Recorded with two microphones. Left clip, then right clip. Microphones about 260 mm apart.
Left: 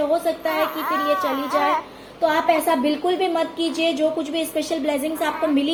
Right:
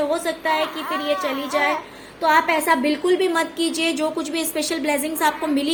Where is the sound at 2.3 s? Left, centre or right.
Right.